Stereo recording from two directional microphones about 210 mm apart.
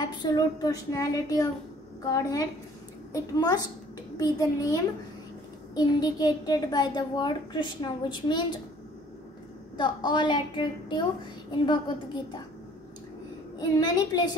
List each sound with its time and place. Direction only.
0.0 s a woman's voice: 20° left (ahead or behind)
5.8 s a child's voice: 20° left (ahead or behind)
9.8 s a child's voice: 20° left (ahead or behind)
13.6 s a child's voice: 20° left (ahead or behind)